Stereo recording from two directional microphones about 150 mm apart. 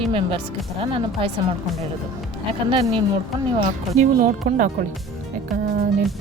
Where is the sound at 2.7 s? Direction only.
35° right (ahead or behind).